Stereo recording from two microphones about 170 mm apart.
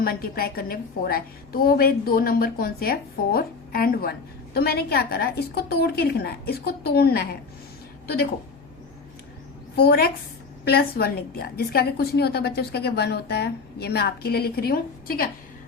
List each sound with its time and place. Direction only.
0.0 s a woman's voice: 60° left (ahead or behind)
9.7 s a woman's voice: 65° left (ahead or behind)